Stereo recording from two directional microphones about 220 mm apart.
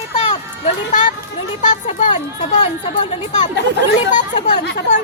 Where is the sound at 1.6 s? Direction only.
35° left (ahead or behind).